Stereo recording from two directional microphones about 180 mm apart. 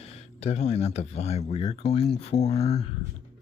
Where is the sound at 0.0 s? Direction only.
35° left (ahead or behind).